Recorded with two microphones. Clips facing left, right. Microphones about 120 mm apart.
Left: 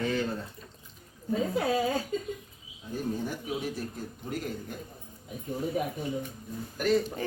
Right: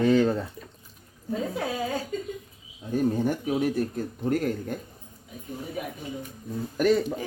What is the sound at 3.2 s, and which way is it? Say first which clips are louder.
Speech: right 8 dB; 60° right (ahead or behind).